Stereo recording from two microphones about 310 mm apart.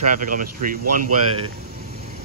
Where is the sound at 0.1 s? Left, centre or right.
Right.